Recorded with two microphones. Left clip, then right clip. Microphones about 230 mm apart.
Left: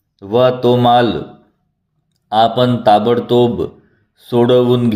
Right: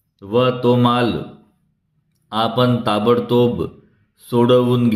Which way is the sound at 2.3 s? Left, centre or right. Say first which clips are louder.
Left 5 dB; centre.